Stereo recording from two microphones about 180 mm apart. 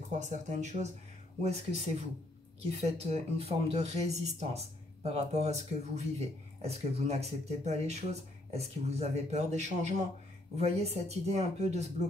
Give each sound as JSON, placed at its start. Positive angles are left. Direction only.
{"t": 0.1, "sound": "speech", "side_deg": -40}